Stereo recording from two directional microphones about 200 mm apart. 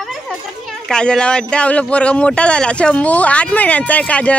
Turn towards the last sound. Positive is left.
turn(degrees=5)  # may be behind; listen again after turning